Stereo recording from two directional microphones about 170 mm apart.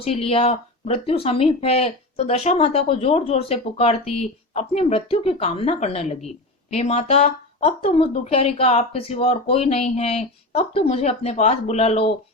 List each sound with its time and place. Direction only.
0.0 s speech: 35° left (ahead or behind)